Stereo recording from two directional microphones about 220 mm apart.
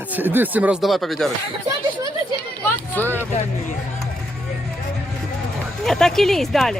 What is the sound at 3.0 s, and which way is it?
Speech, 10° left (ahead or behind).